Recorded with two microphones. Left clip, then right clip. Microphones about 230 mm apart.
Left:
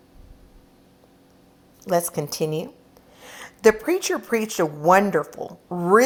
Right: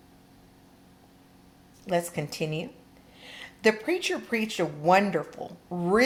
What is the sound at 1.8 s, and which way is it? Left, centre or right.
Speech, left.